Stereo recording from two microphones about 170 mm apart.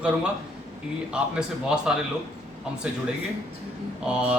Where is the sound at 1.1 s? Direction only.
5° right (ahead or behind).